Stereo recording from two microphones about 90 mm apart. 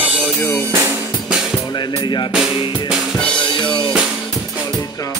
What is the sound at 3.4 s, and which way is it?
Drum kit, 60° left (ahead or behind).